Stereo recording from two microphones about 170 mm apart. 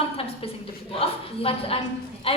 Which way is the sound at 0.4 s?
35° left (ahead or behind).